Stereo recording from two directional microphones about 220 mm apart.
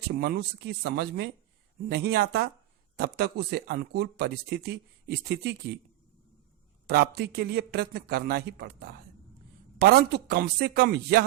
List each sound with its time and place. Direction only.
0.1 s speech: 45° right (ahead or behind)
6.8 s speech: 45° right (ahead or behind)